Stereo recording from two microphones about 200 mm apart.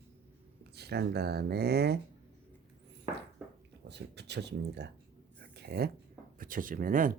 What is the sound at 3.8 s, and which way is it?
Speech, 55° right (ahead or behind).